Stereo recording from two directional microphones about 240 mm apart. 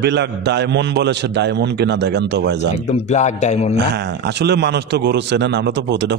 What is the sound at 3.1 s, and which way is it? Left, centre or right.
Speech, left.